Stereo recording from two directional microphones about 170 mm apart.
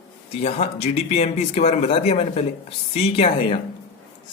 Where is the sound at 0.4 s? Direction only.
40° left (ahead or behind).